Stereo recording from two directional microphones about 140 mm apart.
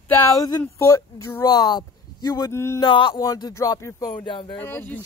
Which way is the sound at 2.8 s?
35° left (ahead or behind).